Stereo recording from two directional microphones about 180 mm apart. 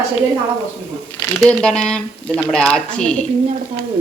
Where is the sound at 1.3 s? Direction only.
5° left (ahead or behind).